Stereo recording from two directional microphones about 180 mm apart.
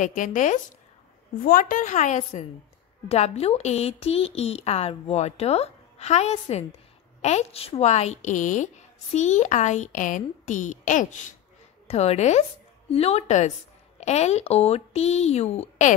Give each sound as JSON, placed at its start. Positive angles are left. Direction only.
{"t": 0.0, "sound": "a woman's voice", "side_deg": 45}